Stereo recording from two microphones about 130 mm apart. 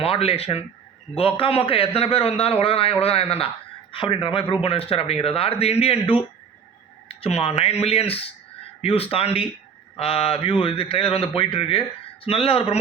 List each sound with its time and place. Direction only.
0.0 s a man's voice: 50° left (ahead or behind)